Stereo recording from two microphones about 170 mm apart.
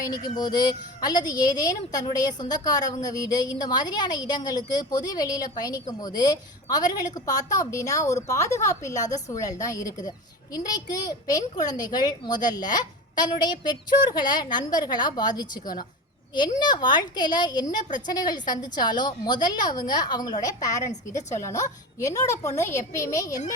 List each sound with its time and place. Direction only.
0.1 s speech: 25° left (ahead or behind)
21.2 s a woman's voice: 45° left (ahead or behind)
21.4 s a woman's voice: 20° left (ahead or behind)